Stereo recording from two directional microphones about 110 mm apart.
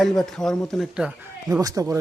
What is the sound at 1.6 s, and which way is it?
Speech, 30° right (ahead or behind).